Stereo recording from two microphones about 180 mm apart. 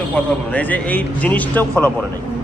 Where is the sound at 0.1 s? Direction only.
10° left (ahead or behind).